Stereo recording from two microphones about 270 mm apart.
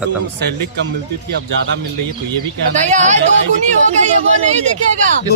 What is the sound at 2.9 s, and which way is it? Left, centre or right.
Speech, right.